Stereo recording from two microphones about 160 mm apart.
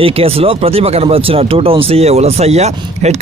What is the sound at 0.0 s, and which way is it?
Speech, 35° right (ahead or behind).